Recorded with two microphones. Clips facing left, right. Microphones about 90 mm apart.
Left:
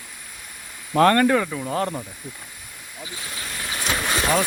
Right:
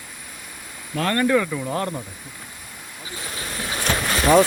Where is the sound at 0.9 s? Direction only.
55° left (ahead or behind).